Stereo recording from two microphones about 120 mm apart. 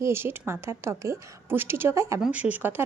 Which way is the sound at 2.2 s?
10° right (ahead or behind).